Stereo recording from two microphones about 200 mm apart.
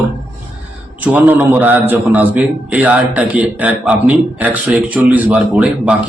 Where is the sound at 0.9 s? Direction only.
10° right (ahead or behind).